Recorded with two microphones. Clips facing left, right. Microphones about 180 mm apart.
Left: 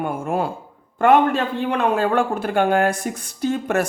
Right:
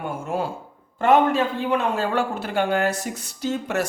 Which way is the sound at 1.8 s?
55° left (ahead or behind).